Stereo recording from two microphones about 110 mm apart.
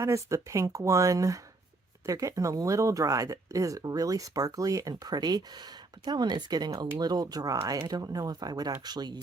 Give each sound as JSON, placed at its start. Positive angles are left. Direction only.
{"t": 0.0, "sound": "speech", "side_deg": -25}